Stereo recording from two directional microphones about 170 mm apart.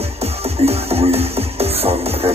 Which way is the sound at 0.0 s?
35° right (ahead or behind).